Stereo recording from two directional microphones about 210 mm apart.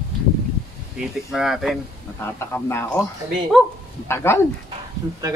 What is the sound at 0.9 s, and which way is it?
Speech, centre (ahead or behind).